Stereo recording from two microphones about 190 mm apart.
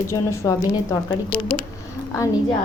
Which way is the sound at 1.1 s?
25° left (ahead or behind).